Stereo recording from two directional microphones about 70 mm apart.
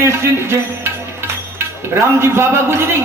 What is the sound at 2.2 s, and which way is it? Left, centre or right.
Speech, right.